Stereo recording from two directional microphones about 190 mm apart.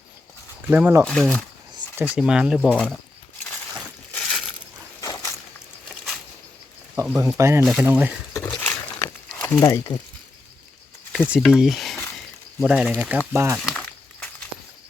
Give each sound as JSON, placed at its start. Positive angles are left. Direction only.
{"t": 0.7, "sound": "speech", "side_deg": -10}
{"t": 1.0, "sound": "speech", "side_deg": 5}
{"t": 4.1, "sound": "crushing", "side_deg": 5}
{"t": 4.9, "sound": "a sound", "side_deg": 20}
{"t": 6.9, "sound": "speech", "side_deg": -5}
{"t": 8.3, "sound": "a sound", "side_deg": 10}
{"t": 9.6, "sound": "speech", "side_deg": 20}
{"t": 11.1, "sound": "speech", "side_deg": -5}
{"t": 13.6, "sound": "a sound", "side_deg": 5}